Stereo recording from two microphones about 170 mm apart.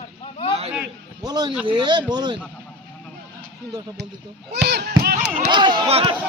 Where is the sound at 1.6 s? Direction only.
25° right (ahead or behind).